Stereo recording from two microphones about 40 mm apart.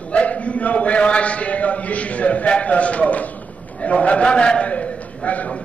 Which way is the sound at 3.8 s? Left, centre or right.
Left.